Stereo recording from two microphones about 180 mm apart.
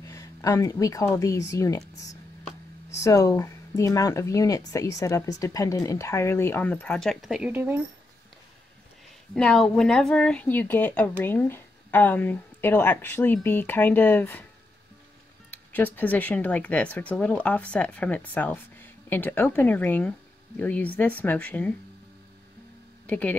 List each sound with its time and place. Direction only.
0.0 s a woman's voice: 15° left (ahead or behind)
3.0 s speech: 20° left (ahead or behind); by 7.8 s 10° right (ahead or behind)
9.3 s speech: 5° left (ahead or behind)
15.5 s speech: 10° left (ahead or behind)
23.0 s speech: 10° left (ahead or behind)